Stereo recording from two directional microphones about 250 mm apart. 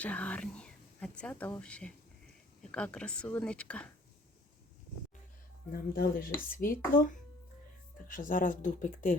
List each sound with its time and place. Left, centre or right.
0.0 s speech: centre
5.7 s speech: left